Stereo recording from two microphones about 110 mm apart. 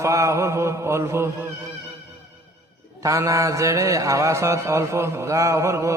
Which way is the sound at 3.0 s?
30° right (ahead or behind).